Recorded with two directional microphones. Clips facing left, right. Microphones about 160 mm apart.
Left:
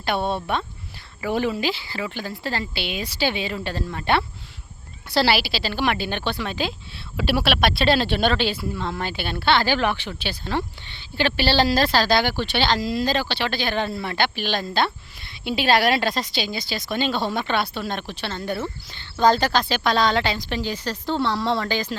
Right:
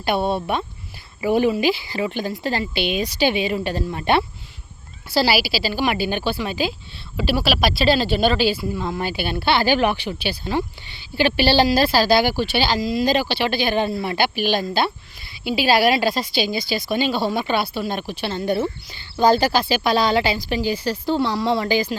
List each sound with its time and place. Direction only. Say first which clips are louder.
0.0 s speech: right 3 dB; 10° right (ahead or behind)
5.1 s speech: right 1 dB; 5° right (ahead or behind)